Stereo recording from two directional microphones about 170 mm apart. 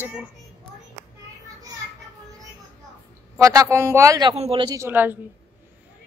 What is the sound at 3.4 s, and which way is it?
Speech, 20° right (ahead or behind).